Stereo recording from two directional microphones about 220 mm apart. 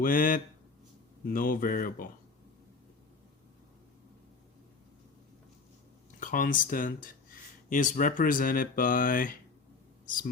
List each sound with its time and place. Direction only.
0.0 s speech: 40° left (ahead or behind)
6.1 s speech: 35° left (ahead or behind)